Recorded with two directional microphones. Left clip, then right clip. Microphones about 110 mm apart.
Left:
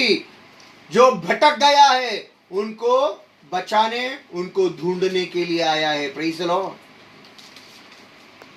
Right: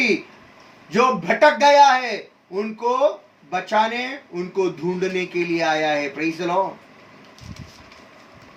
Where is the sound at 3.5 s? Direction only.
15° right (ahead or behind).